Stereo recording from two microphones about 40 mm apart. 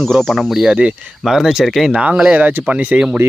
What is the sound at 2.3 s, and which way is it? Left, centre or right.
Speech, right.